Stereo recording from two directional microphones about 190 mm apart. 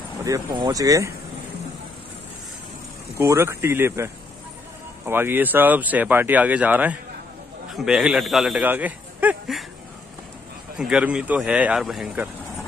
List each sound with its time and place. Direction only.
0.2 s speech: 20° right (ahead or behind)
3.2 s a man's voice: 15° right (ahead or behind)
10.8 s a man's voice: 5° right (ahead or behind)